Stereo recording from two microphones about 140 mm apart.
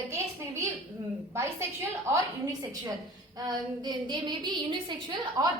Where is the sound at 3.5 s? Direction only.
30° right (ahead or behind).